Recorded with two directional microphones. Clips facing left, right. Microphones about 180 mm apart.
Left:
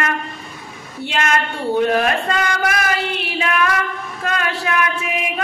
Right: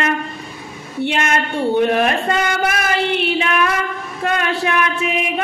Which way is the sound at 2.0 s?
25° right (ahead or behind).